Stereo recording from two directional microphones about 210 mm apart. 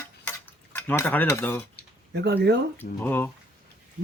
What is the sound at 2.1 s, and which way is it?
Speech, 50° right (ahead or behind).